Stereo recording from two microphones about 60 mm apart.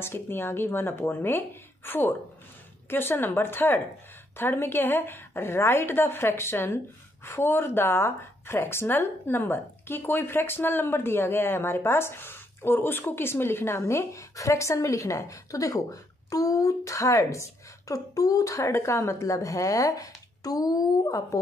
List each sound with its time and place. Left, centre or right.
0.0 s a woman's voice: left
18.6 s speech: left